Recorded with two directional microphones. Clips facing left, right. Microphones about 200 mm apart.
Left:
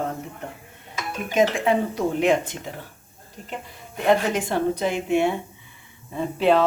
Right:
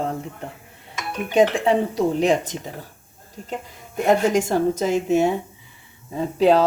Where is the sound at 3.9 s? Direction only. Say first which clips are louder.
Right 3 dB; 45° right (ahead or behind).